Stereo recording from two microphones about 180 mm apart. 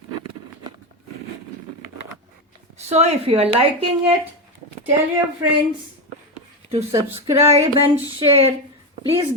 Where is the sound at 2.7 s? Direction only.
35° right (ahead or behind).